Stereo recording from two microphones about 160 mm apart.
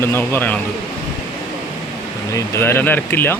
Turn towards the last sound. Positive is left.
turn(degrees=15)  # may be behind; listen again after turning